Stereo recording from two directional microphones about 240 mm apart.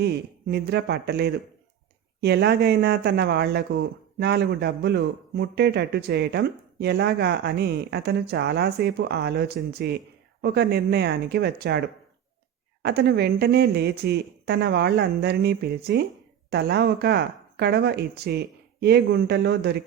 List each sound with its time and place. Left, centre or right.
0.0 s speech: right